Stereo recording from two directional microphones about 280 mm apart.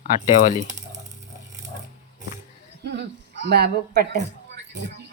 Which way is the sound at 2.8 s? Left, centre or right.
Right.